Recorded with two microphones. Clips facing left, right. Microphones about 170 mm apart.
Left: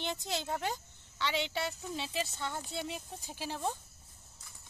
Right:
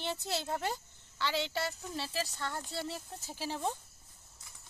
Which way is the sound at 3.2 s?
5° right (ahead or behind).